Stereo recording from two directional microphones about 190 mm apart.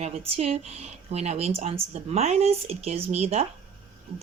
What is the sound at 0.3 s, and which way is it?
Speech, 35° right (ahead or behind).